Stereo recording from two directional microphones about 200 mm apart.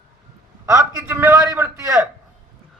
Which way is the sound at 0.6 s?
15° right (ahead or behind).